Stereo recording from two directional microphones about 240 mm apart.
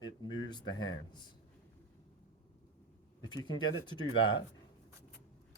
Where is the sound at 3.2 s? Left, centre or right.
Centre.